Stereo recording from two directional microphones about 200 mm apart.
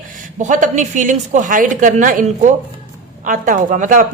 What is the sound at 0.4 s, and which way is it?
A woman's voice, 40° right (ahead or behind).